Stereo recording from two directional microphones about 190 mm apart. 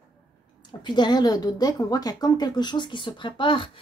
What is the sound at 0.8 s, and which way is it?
A woman's voice, 25° left (ahead or behind).